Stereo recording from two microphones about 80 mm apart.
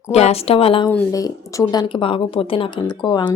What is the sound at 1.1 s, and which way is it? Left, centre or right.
Speech, left.